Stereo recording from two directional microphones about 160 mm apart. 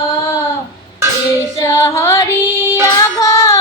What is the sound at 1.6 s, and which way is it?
Female singing, 15° left (ahead or behind).